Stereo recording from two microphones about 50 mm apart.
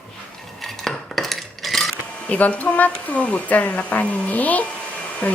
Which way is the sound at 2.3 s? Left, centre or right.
Left.